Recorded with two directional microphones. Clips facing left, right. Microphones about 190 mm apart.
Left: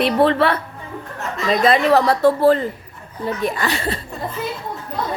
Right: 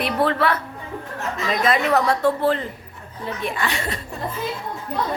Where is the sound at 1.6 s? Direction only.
30° left (ahead or behind).